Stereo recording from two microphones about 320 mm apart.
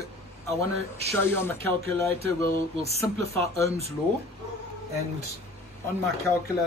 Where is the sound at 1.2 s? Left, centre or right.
Centre.